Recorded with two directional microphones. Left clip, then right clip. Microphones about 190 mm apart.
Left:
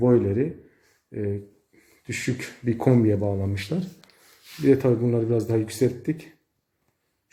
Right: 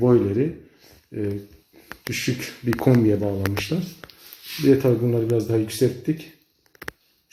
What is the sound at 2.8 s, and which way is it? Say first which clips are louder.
Speech: right 2 dB; 10° left (ahead or behind).